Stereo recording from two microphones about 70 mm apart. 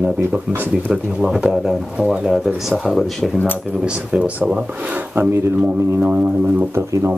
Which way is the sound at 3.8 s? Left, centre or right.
Centre.